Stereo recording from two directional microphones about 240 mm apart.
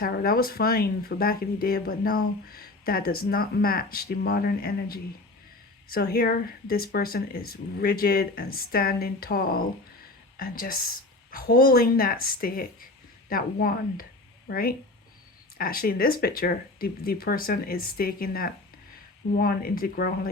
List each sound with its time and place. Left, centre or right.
0.0 s speech: left